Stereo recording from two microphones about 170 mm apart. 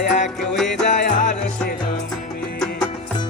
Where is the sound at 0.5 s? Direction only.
Centre (ahead or behind).